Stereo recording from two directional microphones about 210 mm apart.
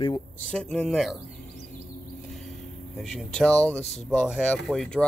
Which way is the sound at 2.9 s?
Centre (ahead or behind).